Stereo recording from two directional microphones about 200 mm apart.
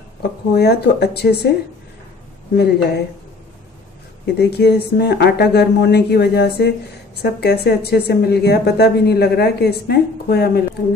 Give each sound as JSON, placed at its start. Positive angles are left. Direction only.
{"t": 0.2, "sound": "a woman's voice", "side_deg": 55}
{"t": 2.5, "sound": "a woman's voice", "side_deg": 55}
{"t": 4.3, "sound": "a woman's voice", "side_deg": 55}